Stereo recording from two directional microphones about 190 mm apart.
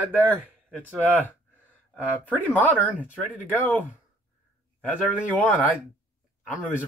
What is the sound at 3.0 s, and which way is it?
Speech, 10° right (ahead or behind).